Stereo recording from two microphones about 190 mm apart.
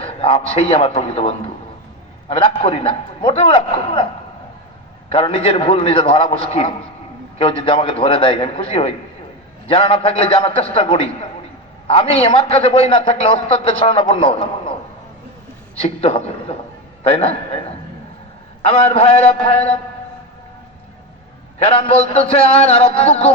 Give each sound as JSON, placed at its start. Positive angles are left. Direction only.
{"t": 0.0, "sound": "a man's voice", "side_deg": 30}
{"t": 2.6, "sound": "a man's voice", "side_deg": 30}
{"t": 5.0, "sound": "a man's voice", "side_deg": 30}
{"t": 15.7, "sound": "a man's voice", "side_deg": 30}
{"t": 21.6, "sound": "a man's voice", "side_deg": 30}